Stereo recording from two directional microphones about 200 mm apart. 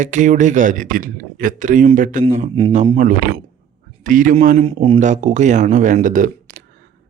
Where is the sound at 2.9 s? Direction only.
40° right (ahead or behind).